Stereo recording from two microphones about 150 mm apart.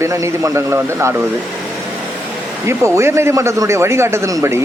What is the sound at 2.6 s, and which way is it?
A man's voice, 15° right (ahead or behind).